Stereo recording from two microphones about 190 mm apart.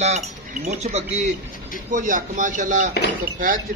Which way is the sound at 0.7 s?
40° right (ahead or behind).